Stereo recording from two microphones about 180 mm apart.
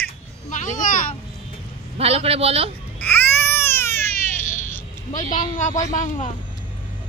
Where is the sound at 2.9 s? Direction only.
10° left (ahead or behind).